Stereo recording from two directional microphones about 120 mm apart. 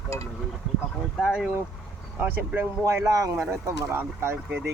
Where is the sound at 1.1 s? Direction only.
5° right (ahead or behind).